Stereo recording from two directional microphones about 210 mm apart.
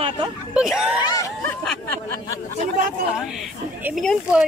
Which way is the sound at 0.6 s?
5° right (ahead or behind).